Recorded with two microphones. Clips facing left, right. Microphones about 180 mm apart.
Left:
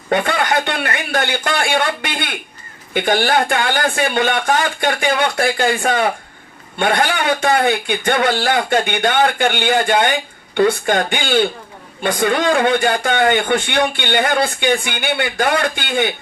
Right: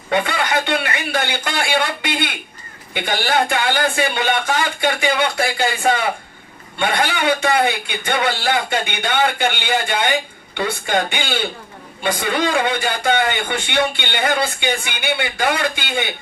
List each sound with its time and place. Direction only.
0.1 s speech: 50° left (ahead or behind)